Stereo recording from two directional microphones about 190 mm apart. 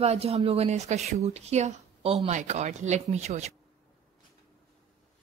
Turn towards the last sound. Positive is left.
turn(degrees=-35)  # may be behind; listen again after turning